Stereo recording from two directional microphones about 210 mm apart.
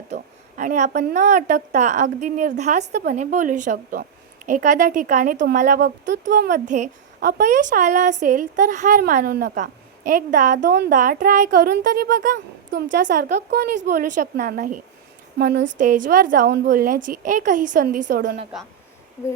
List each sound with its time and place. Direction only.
0.1 s a sound: 35° right (ahead or behind)
1.0 s speech: 35° right (ahead or behind)
13.7 s speech: 35° right (ahead or behind)
15.4 s speech: 50° right (ahead or behind)
15.8 s speech: 40° right (ahead or behind)